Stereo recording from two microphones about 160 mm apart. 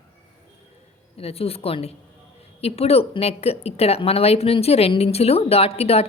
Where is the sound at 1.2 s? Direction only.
40° left (ahead or behind).